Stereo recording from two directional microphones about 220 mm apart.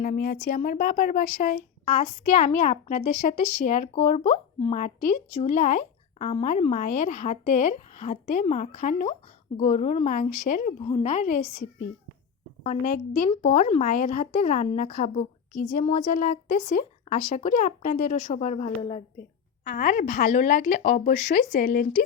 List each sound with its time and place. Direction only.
0.0 s speech: 40° left (ahead or behind)
12.6 s speech: 35° left (ahead or behind)
18.8 s a woman's voice: 20° left (ahead or behind)
19.6 s speech: 40° left (ahead or behind)